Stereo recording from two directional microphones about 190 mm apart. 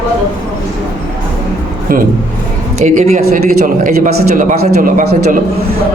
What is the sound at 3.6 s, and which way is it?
A man's voice, 50° right (ahead or behind).